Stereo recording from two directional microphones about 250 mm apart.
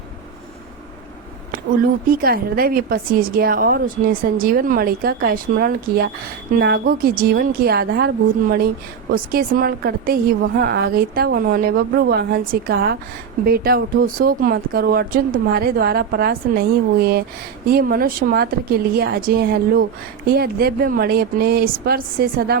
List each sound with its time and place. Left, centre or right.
2.0 s a woman's voice: right